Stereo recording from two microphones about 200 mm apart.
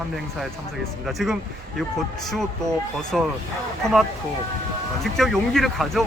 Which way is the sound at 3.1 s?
Centre (ahead or behind).